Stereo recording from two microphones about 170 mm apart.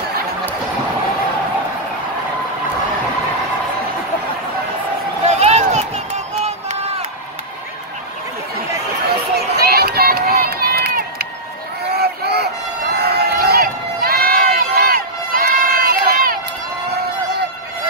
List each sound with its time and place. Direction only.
5.2 s a sound: 40° right (ahead or behind)
9.1 s run: 65° right (ahead or behind)
12.0 s vehicle: 70° right (ahead or behind)
12.9 s run: 70° right (ahead or behind)